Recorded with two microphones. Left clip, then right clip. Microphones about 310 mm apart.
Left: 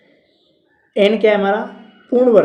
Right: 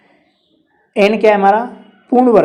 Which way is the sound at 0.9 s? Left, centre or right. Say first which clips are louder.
Right 2 dB; right.